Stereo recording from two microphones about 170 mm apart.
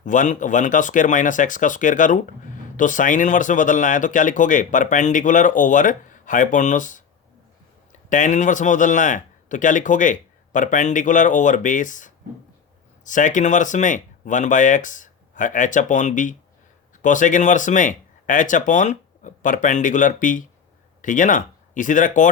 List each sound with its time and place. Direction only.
0.0 s speech: 50° left (ahead or behind)
8.1 s speech: 45° left (ahead or behind)